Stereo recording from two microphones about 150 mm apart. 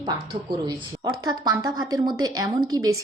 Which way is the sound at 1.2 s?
25° right (ahead or behind).